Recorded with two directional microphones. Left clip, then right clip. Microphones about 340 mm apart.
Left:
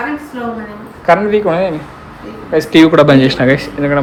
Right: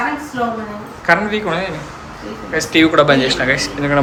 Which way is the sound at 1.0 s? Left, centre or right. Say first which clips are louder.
Left 5 dB; centre.